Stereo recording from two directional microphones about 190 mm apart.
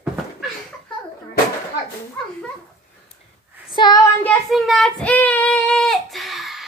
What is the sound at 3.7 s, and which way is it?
Child singing, 20° left (ahead or behind).